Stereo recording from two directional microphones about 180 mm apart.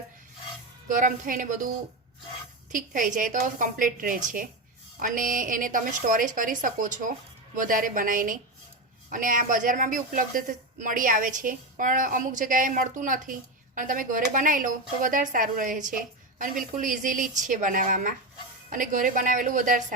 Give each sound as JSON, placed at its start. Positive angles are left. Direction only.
{"t": 0.9, "sound": "speech", "side_deg": -45}
{"t": 2.7, "sound": "speech", "side_deg": -50}